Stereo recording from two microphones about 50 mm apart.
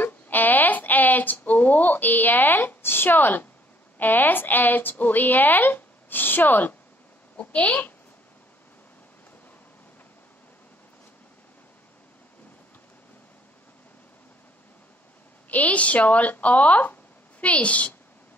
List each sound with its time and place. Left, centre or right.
0.0 s a sound: left
4.0 s speech: left
7.3 s speech: left
15.5 s a woman's voice: left